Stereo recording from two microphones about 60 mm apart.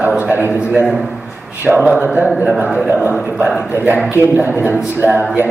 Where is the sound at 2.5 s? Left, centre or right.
Centre.